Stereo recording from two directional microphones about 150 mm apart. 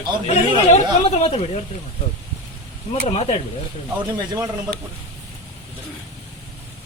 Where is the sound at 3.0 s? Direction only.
45° left (ahead or behind).